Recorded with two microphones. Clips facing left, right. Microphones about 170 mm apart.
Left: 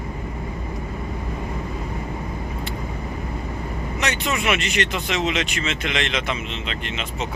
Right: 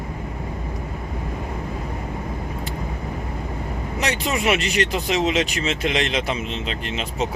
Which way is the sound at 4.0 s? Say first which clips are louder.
Right 2 dB; 35° right (ahead or behind).